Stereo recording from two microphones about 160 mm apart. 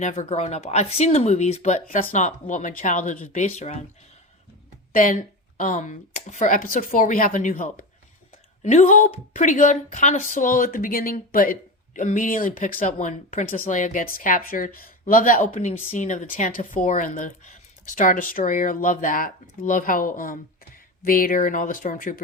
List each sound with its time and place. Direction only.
0.0 s a woman's voice: 45° left (ahead or behind)
4.9 s a woman's voice: 60° left (ahead or behind)